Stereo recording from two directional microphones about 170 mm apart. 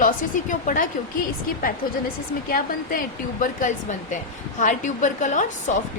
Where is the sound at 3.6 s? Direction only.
50° left (ahead or behind).